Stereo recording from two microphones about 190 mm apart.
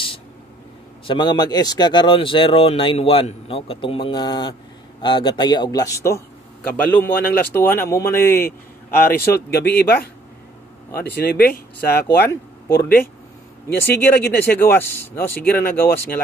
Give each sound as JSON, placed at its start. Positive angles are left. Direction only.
{"t": 1.0, "sound": "speech", "side_deg": 25}
{"t": 8.5, "sound": "speech", "side_deg": 50}
{"t": 11.1, "sound": "speech", "side_deg": 55}
{"t": 13.7, "sound": "speech", "side_deg": 10}